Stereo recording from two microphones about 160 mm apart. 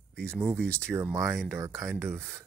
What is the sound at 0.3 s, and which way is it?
Speech, 15° right (ahead or behind).